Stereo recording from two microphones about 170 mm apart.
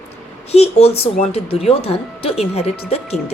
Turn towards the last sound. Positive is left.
turn(degrees=35)  # may be behind; listen again after turning